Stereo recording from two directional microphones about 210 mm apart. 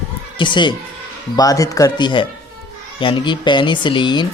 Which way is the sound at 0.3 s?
20° left (ahead or behind).